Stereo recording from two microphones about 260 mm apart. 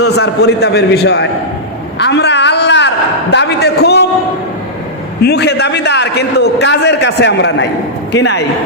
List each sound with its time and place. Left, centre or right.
0.0 s a man's voice: left
2.0 s a sound: left
3.3 s a man's voice: left
5.2 s a man's voice: left